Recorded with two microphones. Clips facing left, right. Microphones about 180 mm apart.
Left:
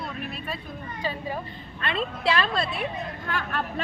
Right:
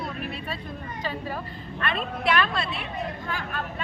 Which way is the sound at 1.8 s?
25° left (ahead or behind).